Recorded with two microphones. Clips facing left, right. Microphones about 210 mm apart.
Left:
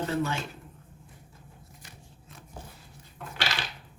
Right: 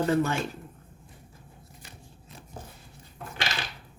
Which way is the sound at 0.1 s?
50° right (ahead or behind).